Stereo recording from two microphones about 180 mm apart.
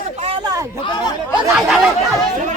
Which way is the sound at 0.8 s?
25° left (ahead or behind).